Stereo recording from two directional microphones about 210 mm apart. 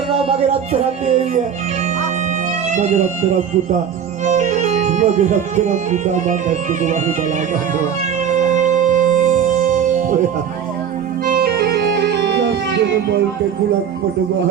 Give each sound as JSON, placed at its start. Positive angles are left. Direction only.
{"t": 0.1, "sound": "speech", "side_deg": -30}
{"t": 2.7, "sound": "speech", "side_deg": -35}
{"t": 4.2, "sound": "speech", "side_deg": -35}
{"t": 8.3, "sound": "music", "side_deg": -35}
{"t": 11.3, "sound": "music", "side_deg": -50}